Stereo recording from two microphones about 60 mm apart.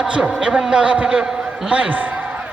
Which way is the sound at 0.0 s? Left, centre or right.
Centre.